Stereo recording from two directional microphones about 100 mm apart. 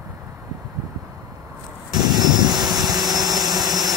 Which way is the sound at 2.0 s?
45° right (ahead or behind).